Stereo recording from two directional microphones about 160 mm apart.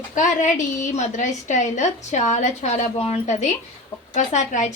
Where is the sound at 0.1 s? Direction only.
50° left (ahead or behind).